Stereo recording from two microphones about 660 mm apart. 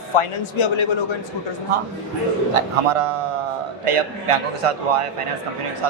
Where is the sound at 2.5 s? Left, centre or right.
Right.